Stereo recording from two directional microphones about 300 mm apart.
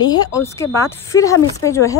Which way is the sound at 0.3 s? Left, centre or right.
Centre.